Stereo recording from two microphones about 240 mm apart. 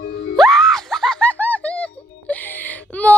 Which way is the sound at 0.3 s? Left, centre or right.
Centre.